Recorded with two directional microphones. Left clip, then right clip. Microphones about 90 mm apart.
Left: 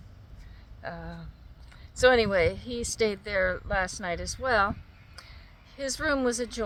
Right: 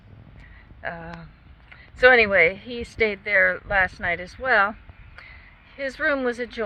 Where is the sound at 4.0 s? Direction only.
90° left.